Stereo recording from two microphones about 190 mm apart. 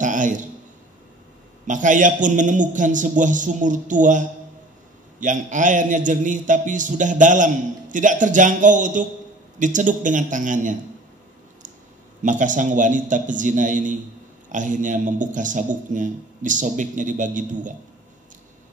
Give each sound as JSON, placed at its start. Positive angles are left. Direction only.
{"t": 0.0, "sound": "a sound", "side_deg": -40}
{"t": 1.7, "sound": "a man's voice", "side_deg": -40}
{"t": 12.2, "sound": "a man's voice", "side_deg": -40}